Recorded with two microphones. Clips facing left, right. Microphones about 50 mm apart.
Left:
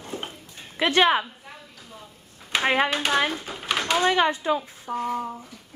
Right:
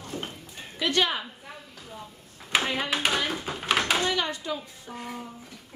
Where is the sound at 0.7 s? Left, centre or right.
Left.